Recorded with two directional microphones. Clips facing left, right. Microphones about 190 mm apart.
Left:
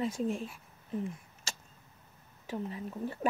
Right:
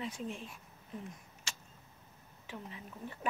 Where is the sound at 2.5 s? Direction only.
40° left (ahead or behind).